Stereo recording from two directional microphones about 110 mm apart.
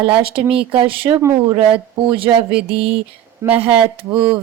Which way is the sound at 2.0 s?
50° right (ahead or behind).